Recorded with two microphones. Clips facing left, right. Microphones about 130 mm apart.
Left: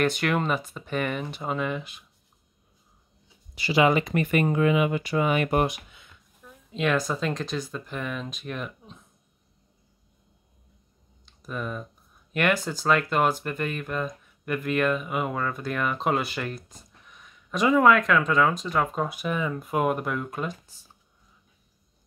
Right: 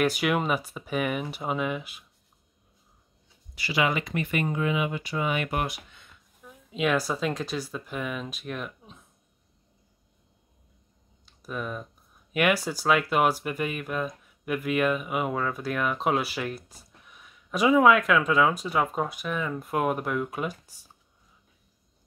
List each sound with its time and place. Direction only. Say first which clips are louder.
0.0 s speech: even; 5° right (ahead or behind)
3.5 s speech: left 5 dB; 30° left (ahead or behind)
4.1 s speech: left 5 dB; 45° left (ahead or behind)
5.9 s a woman's voice: left 1 dB; centre (ahead or behind)
11.2 s speech: left 1 dB; 5° right (ahead or behind)
19.0 s speech: left 2 dB; 5° left (ahead or behind)